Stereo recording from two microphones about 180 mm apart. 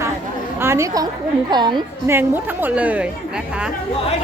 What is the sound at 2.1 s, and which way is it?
Speech, 10° right (ahead or behind).